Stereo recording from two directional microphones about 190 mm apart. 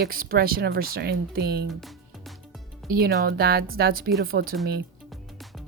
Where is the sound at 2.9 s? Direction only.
55° right (ahead or behind).